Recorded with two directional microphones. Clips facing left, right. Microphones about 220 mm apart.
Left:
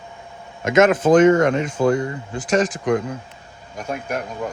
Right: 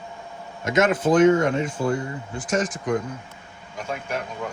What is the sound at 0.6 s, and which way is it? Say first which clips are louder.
Speech: left 5 dB; 90° left.